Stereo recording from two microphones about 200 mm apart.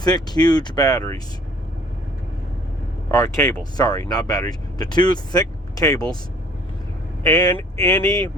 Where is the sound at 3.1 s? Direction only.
15° left (ahead or behind).